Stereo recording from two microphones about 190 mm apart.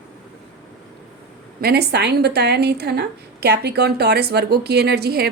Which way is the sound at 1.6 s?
55° right (ahead or behind).